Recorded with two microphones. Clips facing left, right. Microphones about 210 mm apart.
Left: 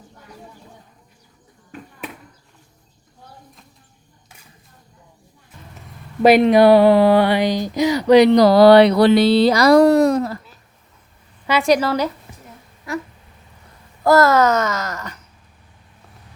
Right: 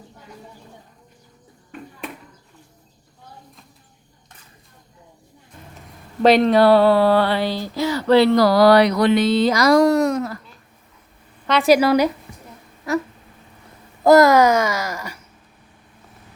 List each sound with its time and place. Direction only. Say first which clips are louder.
6.2 s speech: left 2 dB; 10° left (ahead or behind); by 10.4 s 30° left (ahead or behind)
11.4 s babbling: right 2 dB; centre (ahead or behind)
14.0 s babbling: right 2 dB; 15° right (ahead or behind)